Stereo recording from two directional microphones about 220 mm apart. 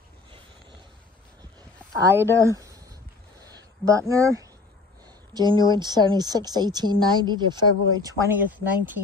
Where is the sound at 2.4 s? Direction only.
15° right (ahead or behind).